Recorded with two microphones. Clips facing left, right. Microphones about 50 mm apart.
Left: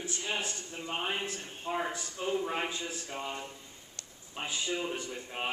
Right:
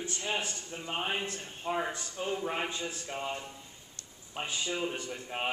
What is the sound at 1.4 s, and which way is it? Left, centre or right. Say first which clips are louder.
A man's voice: right 1 dB; centre.